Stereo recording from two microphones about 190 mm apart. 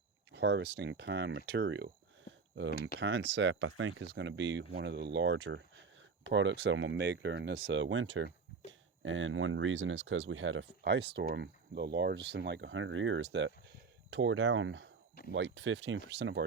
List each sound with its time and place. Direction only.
0.3 s speech: 65° right (ahead or behind)
3.0 s speech: 70° right (ahead or behind)
6.2 s speech: 80° right
15.3 s speech: 70° right (ahead or behind)